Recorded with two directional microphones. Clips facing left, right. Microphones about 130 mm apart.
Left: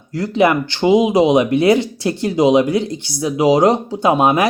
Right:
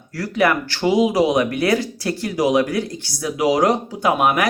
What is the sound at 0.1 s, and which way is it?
Speech, 20° left (ahead or behind).